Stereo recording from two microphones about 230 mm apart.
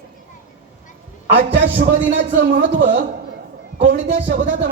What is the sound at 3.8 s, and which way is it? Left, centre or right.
Speech, right.